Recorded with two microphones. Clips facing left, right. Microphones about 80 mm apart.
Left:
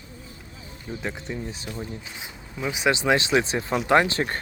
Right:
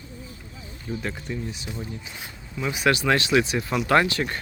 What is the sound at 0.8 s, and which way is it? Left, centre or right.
Speech, centre.